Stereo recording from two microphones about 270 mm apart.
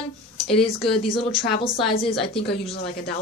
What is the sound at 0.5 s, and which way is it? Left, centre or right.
Speech, centre.